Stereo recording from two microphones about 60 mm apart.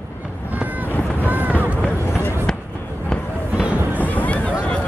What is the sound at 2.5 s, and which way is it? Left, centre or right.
Fireworks, centre.